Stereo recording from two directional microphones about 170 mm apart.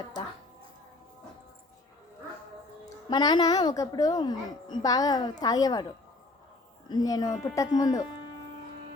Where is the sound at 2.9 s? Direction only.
25° left (ahead or behind).